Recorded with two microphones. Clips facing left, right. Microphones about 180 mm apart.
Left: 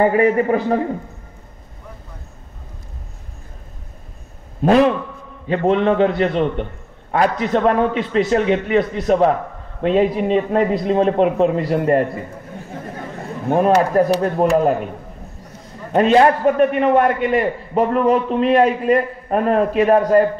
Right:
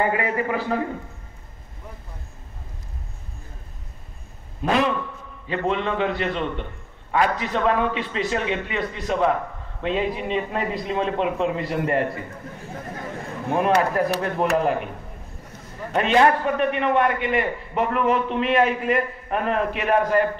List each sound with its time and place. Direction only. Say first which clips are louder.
0.0 s a man's voice: left 8 dB; 35° left (ahead or behind)
5.5 s a man's voice: left 8 dB; 45° left (ahead or behind)
13.5 s a man's voice: left 5 dB; 35° left (ahead or behind)
15.9 s a man's voice: left 5 dB; 35° left (ahead or behind)